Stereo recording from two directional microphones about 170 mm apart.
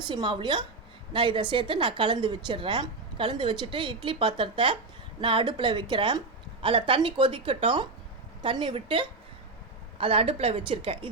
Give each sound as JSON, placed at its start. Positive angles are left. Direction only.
{"t": 0.1, "sound": "a woman's voice", "side_deg": -25}